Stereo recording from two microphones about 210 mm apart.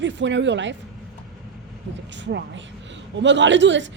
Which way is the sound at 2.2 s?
55° right (ahead or behind).